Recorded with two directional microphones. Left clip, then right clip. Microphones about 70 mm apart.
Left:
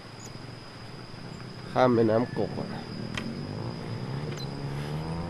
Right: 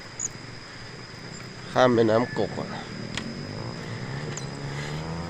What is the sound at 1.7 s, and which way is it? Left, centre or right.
Speech, centre.